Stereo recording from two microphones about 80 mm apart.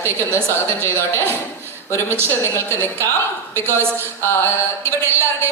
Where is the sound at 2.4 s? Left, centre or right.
Left.